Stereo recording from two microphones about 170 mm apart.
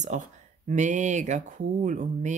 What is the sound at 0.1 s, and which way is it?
Speech, 45° right (ahead or behind).